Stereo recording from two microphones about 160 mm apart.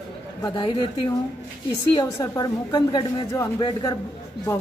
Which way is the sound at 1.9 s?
25° left (ahead or behind).